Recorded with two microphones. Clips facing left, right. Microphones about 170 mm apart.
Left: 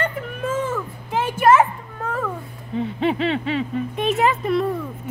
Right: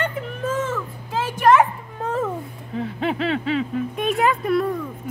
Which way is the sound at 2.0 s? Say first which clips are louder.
Right 2 dB; 25° right (ahead or behind).